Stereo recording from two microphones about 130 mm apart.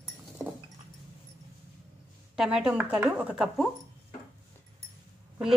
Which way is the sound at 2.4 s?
5° right (ahead or behind).